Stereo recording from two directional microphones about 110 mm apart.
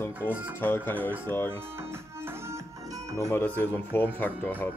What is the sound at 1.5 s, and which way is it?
Music, 20° right (ahead or behind).